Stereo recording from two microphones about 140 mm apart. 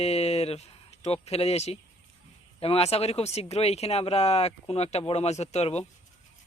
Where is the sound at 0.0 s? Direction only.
50° left (ahead or behind).